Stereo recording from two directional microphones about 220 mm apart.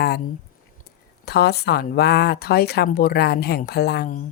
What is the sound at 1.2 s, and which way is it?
Speech, 45° left (ahead or behind).